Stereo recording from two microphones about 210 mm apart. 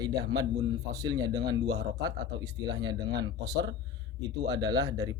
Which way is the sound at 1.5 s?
55° right (ahead or behind).